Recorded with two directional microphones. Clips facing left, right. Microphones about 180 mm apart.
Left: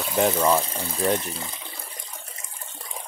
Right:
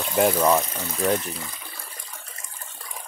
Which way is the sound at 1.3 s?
25° left (ahead or behind).